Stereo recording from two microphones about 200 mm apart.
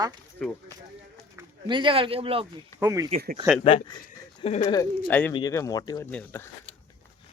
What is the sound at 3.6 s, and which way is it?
Speech, 25° left (ahead or behind).